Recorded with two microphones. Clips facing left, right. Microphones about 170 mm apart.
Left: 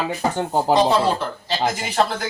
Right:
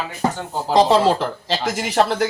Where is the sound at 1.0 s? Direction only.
90° right.